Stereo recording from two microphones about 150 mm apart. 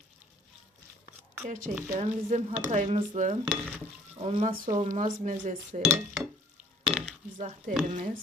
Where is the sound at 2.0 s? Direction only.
50° right (ahead or behind).